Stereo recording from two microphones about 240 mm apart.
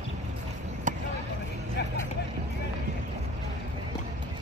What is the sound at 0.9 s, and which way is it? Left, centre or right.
Vehicle, right.